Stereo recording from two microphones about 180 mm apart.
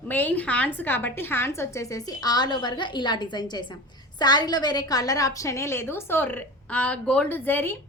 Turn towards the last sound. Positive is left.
turn(degrees=10)  # may be behind; listen again after turning